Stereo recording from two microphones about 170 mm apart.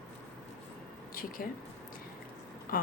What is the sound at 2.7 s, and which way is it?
Speech, 55° left (ahead or behind).